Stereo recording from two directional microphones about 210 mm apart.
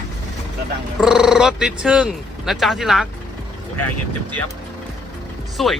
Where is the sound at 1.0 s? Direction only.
5° right (ahead or behind).